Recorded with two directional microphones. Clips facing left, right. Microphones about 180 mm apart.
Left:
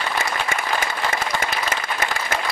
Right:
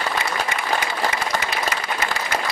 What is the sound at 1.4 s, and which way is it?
Applause, 50° left (ahead or behind).